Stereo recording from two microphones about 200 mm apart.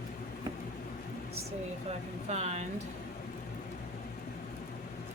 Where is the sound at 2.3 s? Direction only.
35° right (ahead or behind).